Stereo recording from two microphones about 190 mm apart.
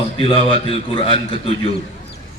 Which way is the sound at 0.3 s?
25° left (ahead or behind).